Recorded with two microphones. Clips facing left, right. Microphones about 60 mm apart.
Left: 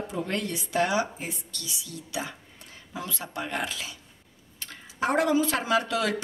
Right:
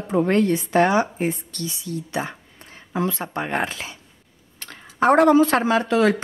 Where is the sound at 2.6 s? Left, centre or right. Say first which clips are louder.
Right 13 dB; right.